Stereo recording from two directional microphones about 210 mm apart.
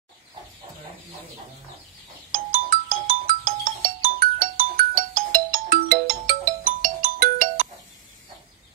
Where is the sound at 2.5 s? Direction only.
45° right (ahead or behind).